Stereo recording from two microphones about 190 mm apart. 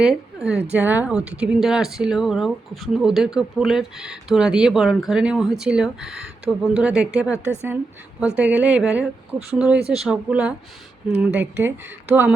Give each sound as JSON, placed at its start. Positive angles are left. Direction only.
{"t": 0.0, "sound": "a woman's voice", "side_deg": -5}
{"t": 8.4, "sound": "speech", "side_deg": -5}